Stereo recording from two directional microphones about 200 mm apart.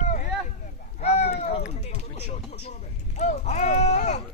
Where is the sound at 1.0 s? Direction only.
30° left (ahead or behind).